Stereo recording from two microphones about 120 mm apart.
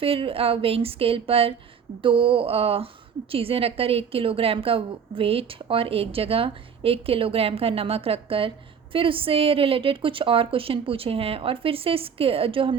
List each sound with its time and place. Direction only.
0.0 s a woman's voice: 50° right (ahead or behind)